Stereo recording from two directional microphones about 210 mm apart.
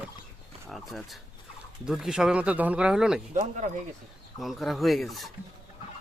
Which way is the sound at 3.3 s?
35° right (ahead or behind).